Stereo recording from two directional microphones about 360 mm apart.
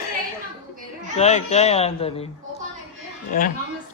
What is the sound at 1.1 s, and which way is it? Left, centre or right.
Speech, centre.